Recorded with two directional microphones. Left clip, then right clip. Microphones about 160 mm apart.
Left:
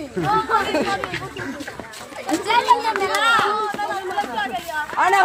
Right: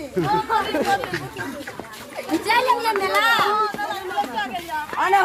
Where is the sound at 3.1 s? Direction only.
10° left (ahead or behind).